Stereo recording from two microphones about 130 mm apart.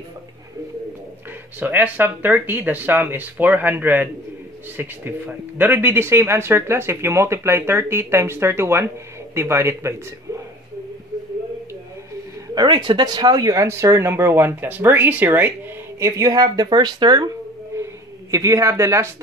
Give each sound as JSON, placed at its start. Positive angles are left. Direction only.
{"t": 1.6, "sound": "speech", "side_deg": -15}
{"t": 12.5, "sound": "speech", "side_deg": -35}
{"t": 16.0, "sound": "speech", "side_deg": -25}
{"t": 17.7, "sound": "a sound", "side_deg": -20}
{"t": 18.3, "sound": "speech", "side_deg": -25}